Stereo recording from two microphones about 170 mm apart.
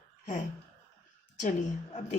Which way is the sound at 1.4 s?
45° left (ahead or behind).